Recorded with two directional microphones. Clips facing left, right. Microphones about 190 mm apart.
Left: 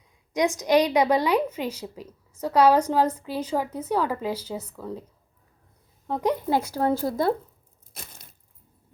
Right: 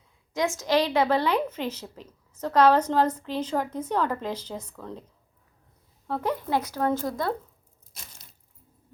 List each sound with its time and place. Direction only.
0.3 s a woman's voice: 15° left (ahead or behind)
6.1 s a woman's voice: 15° left (ahead or behind)
6.5 s a woman's voice: 30° left (ahead or behind)
7.9 s a sound: 55° left (ahead or behind)